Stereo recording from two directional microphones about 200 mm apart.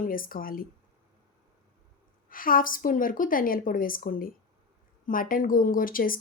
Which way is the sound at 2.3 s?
45° left (ahead or behind).